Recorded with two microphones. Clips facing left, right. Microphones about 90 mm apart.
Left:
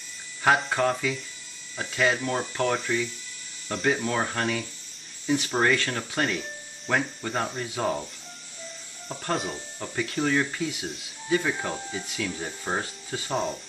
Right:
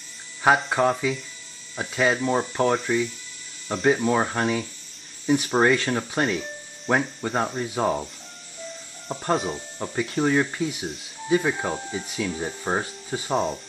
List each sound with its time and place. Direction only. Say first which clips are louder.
0.6 s speech: right 3 dB; 10° right (ahead or behind)
9.3 s speech: right 5 dB; centre (ahead or behind)
9.8 s speech: right 3 dB; 20° right (ahead or behind)
11.2 s speech: right 4 dB; 15° right (ahead or behind)
13.3 s speech: right 4 dB; centre (ahead or behind)